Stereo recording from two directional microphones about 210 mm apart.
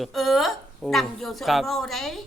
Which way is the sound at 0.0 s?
Centre (ahead or behind).